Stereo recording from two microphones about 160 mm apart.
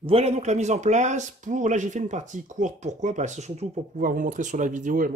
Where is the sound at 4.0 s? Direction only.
60° right (ahead or behind).